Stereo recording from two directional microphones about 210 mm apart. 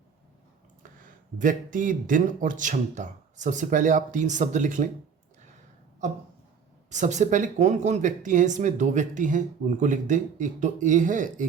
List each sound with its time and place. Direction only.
0.8 s speech: 40° right (ahead or behind)
6.9 s speech: 35° right (ahead or behind)